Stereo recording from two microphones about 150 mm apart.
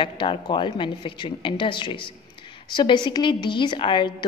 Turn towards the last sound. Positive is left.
turn(degrees=35)  # may be behind; listen again after turning